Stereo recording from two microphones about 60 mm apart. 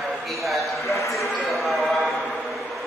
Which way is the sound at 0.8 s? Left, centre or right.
Left.